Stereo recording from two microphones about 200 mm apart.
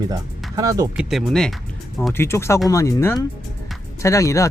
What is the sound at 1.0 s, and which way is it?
Speech, centre (ahead or behind).